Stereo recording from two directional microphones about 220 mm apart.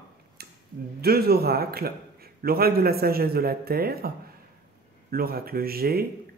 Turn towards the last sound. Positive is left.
turn(degrees=-45)  # may be behind; listen again after turning